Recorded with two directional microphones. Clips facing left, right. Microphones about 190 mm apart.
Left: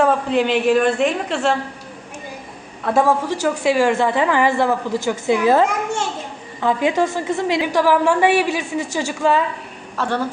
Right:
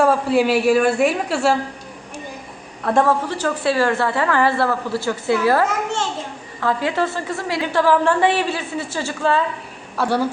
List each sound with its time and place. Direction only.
0.0 s a man's voice: 5° right (ahead or behind)
2.8 s a woman's voice: 5° left (ahead or behind)
10.0 s a man's voice: 10° right (ahead or behind)